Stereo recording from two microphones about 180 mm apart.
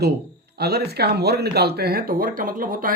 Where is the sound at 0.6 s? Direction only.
65° right (ahead or behind).